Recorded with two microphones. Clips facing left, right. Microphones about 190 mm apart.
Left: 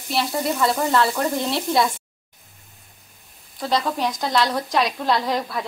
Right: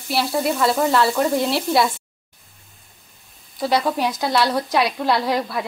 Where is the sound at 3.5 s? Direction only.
10° right (ahead or behind).